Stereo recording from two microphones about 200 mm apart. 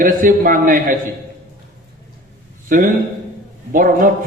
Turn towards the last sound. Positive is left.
turn(degrees=-45)  # may be behind; listen again after turning